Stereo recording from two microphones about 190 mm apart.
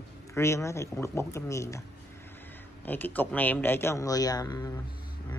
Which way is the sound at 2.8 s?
10° left (ahead or behind).